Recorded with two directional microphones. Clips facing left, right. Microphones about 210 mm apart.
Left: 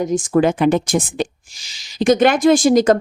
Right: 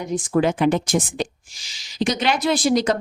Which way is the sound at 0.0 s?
45° left (ahead or behind).